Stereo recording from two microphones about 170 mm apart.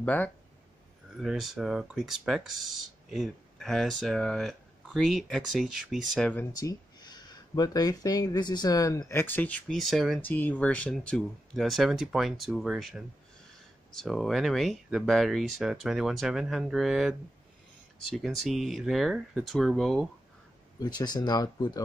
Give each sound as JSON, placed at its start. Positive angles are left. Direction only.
{"t": 0.0, "sound": "speech", "side_deg": 10}
{"t": 1.1, "sound": "speech", "side_deg": 0}
{"t": 6.5, "sound": "speech", "side_deg": 20}
{"t": 10.2, "sound": "speech", "side_deg": 10}
{"t": 18.1, "sound": "speech", "side_deg": 0}
{"t": 20.8, "sound": "speech", "side_deg": 25}